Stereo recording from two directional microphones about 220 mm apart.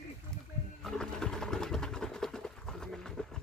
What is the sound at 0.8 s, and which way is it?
Sewing machine, 5° left (ahead or behind).